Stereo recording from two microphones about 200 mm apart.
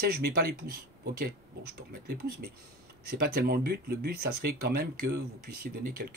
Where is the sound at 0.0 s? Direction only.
50° right (ahead or behind).